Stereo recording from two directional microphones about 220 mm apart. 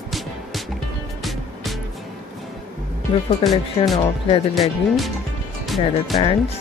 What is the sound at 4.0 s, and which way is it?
Speech, 25° left (ahead or behind).